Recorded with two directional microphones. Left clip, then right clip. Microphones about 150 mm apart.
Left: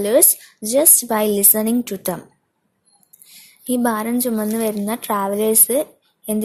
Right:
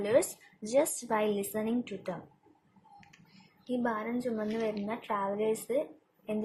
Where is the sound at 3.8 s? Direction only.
70° left (ahead or behind).